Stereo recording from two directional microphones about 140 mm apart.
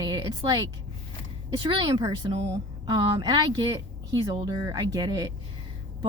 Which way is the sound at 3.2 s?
30° right (ahead or behind).